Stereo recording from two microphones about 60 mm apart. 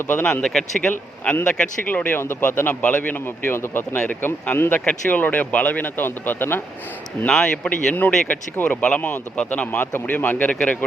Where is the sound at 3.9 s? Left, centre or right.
Left.